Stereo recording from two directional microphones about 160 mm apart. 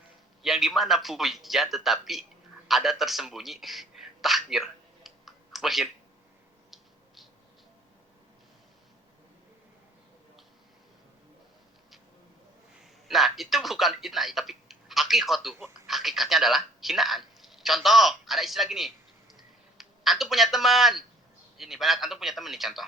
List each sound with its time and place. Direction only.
0.4 s a man's voice: centre (ahead or behind)
12.8 s a man's voice: centre (ahead or behind)